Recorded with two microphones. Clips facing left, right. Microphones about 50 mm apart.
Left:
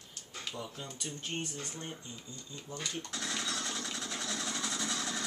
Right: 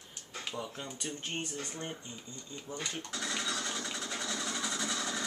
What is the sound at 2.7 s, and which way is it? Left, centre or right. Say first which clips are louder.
Speech: right 1 dB; centre.